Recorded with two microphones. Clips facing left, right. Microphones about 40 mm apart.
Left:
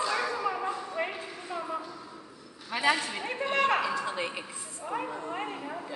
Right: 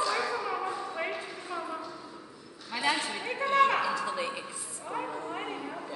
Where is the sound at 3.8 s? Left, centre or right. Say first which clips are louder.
Even; left.